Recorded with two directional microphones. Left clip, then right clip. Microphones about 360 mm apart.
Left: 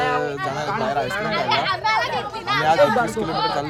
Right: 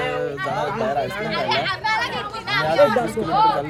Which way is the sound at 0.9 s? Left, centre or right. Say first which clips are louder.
Left 1 dB; left.